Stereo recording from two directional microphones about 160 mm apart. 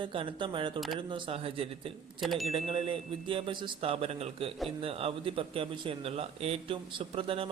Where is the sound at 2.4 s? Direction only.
35° right (ahead or behind).